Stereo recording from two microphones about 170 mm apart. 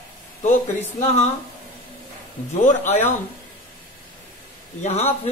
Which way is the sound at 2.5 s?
45° left (ahead or behind).